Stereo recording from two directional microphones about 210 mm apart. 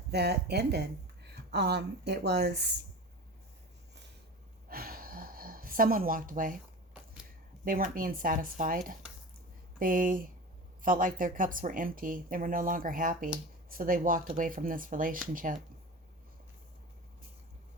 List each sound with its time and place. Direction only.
0.1 s speech: 50° right (ahead or behind)
4.7 s gasp: 45° right (ahead or behind)
7.6 s a woman's voice: 40° right (ahead or behind)